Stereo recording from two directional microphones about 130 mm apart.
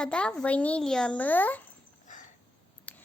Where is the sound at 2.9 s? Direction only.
10° left (ahead or behind).